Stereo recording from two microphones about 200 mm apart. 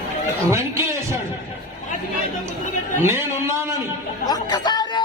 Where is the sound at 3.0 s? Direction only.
15° right (ahead or behind).